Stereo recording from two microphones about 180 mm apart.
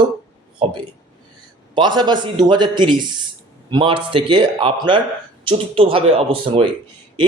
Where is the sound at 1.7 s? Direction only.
25° right (ahead or behind).